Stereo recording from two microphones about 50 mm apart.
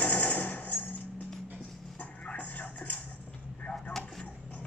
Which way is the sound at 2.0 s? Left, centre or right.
Left.